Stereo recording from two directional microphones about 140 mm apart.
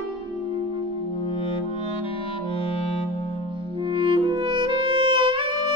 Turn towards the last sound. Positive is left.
turn(degrees=-35)  # may be behind; listen again after turning